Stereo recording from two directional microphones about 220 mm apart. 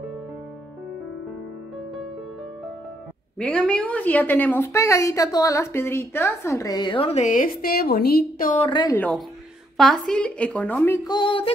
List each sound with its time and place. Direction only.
3.3 s a woman's voice: 5° left (ahead or behind); by 8.6 s 35° left (ahead or behind)
8.6 s music: 20° left (ahead or behind)
8.9 s a woman's voice: 5° left (ahead or behind)
11.1 s music: 25° left (ahead or behind)